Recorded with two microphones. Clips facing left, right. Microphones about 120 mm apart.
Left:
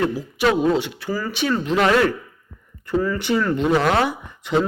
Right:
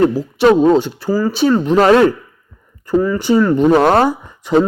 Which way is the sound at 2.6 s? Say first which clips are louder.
Right 7 dB; 35° right (ahead or behind).